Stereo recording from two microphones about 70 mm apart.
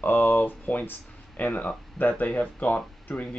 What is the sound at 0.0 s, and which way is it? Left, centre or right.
Speech, left.